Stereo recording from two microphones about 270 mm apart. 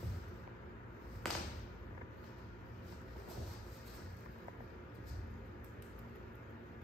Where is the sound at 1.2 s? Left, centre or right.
Centre.